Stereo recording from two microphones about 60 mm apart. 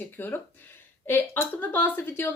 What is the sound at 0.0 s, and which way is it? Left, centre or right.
Speech, left.